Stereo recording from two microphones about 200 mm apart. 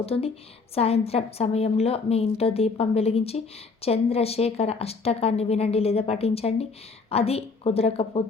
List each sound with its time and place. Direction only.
0.0 s a woman's voice: 30° left (ahead or behind)